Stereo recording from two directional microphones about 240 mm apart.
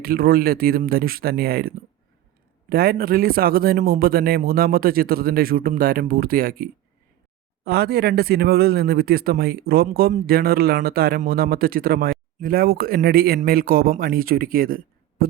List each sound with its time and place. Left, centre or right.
0.0 s speech: right